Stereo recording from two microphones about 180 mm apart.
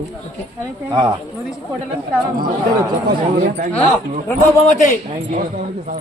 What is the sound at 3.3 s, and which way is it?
Speech, 45° right (ahead or behind).